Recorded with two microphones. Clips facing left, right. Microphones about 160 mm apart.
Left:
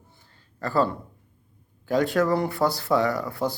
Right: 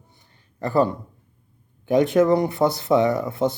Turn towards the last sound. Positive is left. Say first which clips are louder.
# right 4 dB
turn(degrees=-20)  # may be behind; listen again after turning